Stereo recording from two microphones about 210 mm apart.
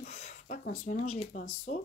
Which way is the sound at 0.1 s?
35° left (ahead or behind).